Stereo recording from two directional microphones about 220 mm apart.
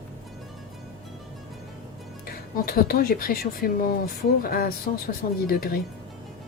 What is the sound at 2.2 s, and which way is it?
Speech, 40° left (ahead or behind).